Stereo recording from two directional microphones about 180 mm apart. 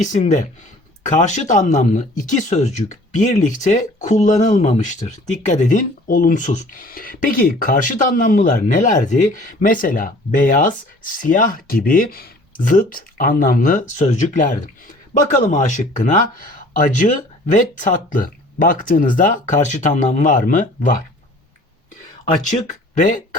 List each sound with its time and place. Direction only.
0.0 s speech: 40° left (ahead or behind)
23.0 s speech: 45° left (ahead or behind)